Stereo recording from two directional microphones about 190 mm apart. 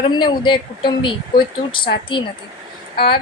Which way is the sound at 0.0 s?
25° left (ahead or behind).